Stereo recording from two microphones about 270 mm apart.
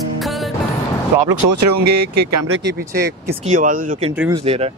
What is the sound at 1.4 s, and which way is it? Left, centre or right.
Speech, right.